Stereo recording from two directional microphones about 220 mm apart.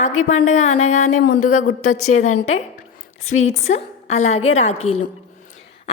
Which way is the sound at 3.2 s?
70° left (ahead or behind).